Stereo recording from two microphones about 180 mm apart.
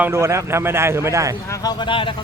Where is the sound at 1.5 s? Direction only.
20° left (ahead or behind).